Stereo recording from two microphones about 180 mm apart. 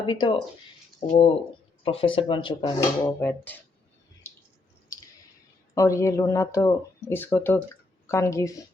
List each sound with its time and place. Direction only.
0.0 s speech: 25° left (ahead or behind)
1.8 s speech: 30° left (ahead or behind); by 3.6 s 10° left (ahead or behind)
5.7 s speech: 15° left (ahead or behind)